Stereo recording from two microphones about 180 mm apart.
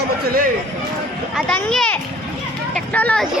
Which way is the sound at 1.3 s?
5° left (ahead or behind).